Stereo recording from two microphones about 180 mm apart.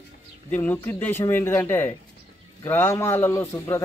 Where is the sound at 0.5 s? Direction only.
10° left (ahead or behind).